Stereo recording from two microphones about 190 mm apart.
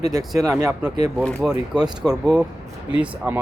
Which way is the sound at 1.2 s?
5° left (ahead or behind).